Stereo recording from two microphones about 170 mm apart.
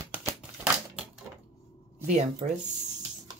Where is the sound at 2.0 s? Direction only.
45° right (ahead or behind).